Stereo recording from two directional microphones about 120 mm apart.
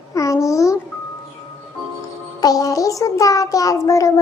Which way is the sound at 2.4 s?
30° left (ahead or behind).